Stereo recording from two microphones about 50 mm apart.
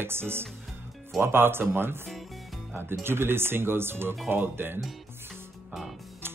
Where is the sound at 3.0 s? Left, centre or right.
Right.